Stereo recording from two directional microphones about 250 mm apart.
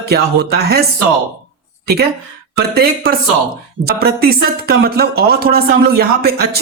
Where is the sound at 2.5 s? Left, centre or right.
Right.